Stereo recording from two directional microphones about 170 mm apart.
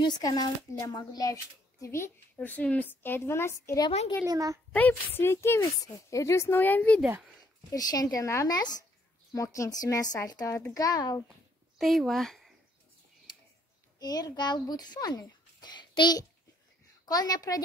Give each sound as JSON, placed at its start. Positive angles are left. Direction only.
{"t": 0.0, "sound": "a child's voice", "side_deg": 25}
{"t": 4.3, "sound": "a child's voice", "side_deg": -20}
{"t": 4.7, "sound": "a child's voice", "side_deg": 10}
{"t": 7.0, "sound": "speech", "side_deg": -10}
{"t": 7.7, "sound": "speech", "side_deg": 20}
{"t": 11.8, "sound": "speech", "side_deg": 0}
{"t": 13.9, "sound": "a child's voice", "side_deg": 25}